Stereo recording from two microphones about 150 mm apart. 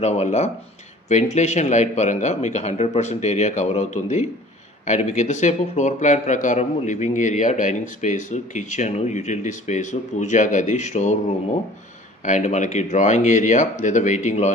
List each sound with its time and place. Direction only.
0.0 s speech: 45° left (ahead or behind)